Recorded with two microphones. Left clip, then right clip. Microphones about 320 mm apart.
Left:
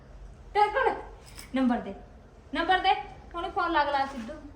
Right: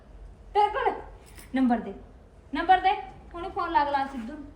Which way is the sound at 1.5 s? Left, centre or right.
Centre.